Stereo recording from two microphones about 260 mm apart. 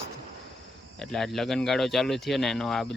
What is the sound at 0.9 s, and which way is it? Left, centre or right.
Speech, centre.